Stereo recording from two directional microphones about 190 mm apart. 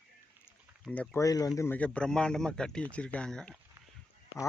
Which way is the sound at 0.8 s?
5° left (ahead or behind).